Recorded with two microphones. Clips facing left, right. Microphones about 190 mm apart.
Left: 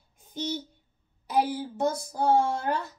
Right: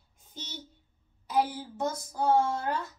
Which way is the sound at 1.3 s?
10° left (ahead or behind).